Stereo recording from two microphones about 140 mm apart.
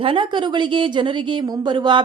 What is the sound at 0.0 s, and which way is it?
A woman's voice, 40° right (ahead or behind).